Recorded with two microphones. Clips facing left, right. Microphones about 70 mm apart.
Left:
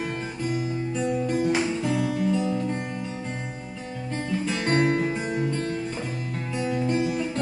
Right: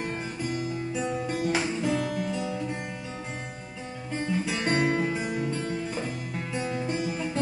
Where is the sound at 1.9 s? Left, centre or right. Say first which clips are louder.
Left 4 dB; centre.